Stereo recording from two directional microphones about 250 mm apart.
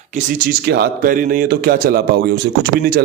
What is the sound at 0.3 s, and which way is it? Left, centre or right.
Speech, right.